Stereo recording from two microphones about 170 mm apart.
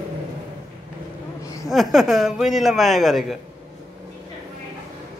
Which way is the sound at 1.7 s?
Centre (ahead or behind).